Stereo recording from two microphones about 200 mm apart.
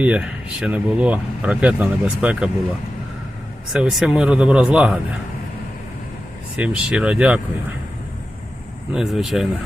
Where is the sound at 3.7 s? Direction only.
5° right (ahead or behind).